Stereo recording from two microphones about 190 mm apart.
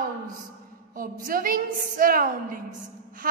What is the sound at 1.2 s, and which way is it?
A woman's voice, 50° right (ahead or behind).